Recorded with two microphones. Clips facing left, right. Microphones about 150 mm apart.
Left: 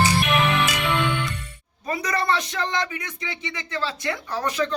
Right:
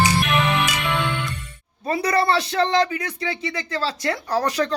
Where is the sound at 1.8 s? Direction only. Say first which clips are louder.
Right 5 dB; 35° right (ahead or behind).